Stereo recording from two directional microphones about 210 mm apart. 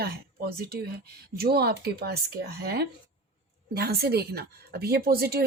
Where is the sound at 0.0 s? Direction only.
45° right (ahead or behind).